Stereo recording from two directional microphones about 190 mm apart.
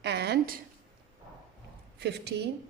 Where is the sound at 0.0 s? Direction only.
60° right (ahead or behind).